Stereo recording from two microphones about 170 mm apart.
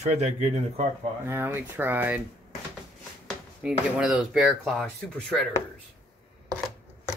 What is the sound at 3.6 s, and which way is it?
Speech, 5° right (ahead or behind).